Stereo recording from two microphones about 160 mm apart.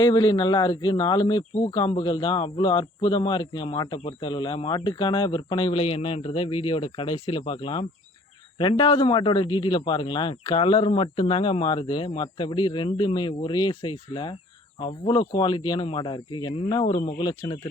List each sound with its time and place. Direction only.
0.0 s a man's voice: 25° left (ahead or behind)